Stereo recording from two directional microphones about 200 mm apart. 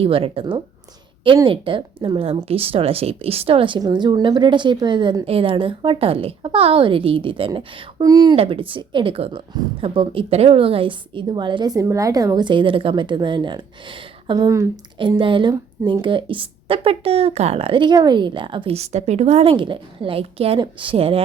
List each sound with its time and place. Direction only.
0.0 s a woman's voice: 25° right (ahead or behind)